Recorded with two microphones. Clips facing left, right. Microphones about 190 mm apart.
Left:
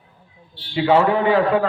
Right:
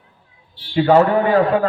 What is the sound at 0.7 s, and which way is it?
Speech, 45° right (ahead or behind).